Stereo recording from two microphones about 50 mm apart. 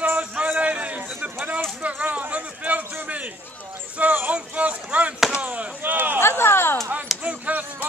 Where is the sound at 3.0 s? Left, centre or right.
Right.